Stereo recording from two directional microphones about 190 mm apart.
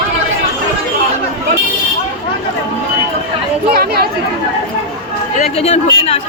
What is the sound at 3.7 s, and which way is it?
Speech, 55° right (ahead or behind).